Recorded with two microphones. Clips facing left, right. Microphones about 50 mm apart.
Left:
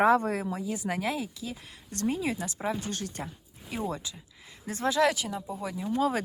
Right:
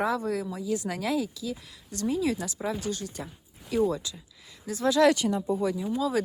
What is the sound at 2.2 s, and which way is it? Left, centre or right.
Speech, left.